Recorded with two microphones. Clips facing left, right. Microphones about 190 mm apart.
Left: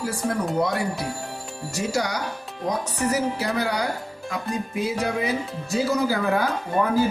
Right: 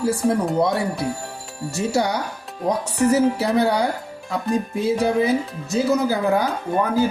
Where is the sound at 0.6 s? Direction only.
25° right (ahead or behind).